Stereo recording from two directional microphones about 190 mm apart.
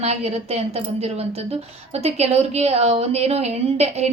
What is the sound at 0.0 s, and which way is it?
Speech, 35° right (ahead or behind).